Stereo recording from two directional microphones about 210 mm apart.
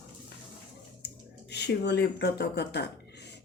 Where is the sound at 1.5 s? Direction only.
55° left (ahead or behind).